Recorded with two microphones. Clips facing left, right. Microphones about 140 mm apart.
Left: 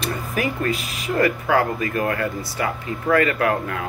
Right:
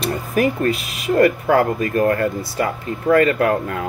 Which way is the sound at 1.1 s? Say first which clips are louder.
Right 5 dB; 40° right (ahead or behind).